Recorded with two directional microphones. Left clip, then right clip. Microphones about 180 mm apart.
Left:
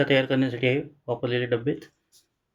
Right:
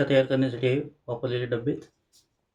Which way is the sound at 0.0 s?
20° left (ahead or behind).